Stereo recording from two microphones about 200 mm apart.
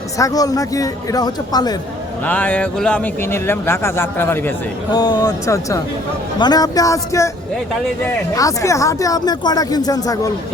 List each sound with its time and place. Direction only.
0.2 s speech: 15° left (ahead or behind)
2.2 s speech: 10° left (ahead or behind)